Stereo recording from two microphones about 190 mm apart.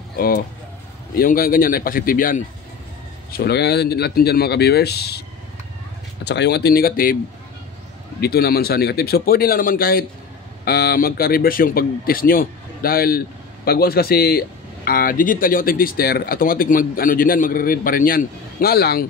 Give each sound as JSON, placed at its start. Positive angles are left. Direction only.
{"t": 1.1, "sound": "speech", "side_deg": 50}
{"t": 6.2, "sound": "speech", "side_deg": 65}
{"t": 8.2, "sound": "speech", "side_deg": 55}